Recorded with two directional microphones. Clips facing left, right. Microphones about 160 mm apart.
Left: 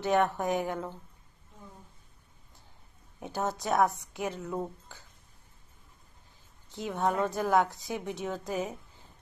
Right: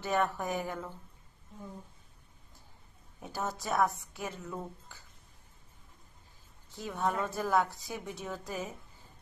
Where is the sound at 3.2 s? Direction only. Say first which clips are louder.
Left 4 dB; 20° left (ahead or behind).